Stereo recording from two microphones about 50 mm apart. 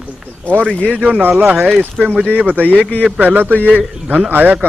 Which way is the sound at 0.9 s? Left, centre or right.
Right.